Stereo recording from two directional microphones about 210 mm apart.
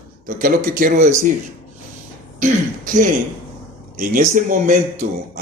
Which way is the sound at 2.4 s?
40° right (ahead or behind).